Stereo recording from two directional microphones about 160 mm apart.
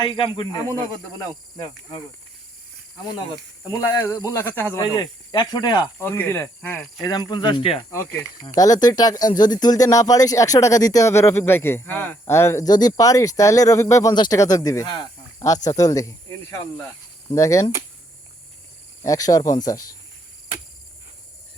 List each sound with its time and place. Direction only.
0.0 s speech: 30° left (ahead or behind)
3.7 s speech: 15° left (ahead or behind)
4.8 s speech: 25° left (ahead or behind)
6.0 s speech: 15° left (ahead or behind)
6.6 s speech: 5° left (ahead or behind)
7.0 s speech: 25° left (ahead or behind)
8.4 s speech: 20° left (ahead or behind)
19.0 s speech: 20° left (ahead or behind)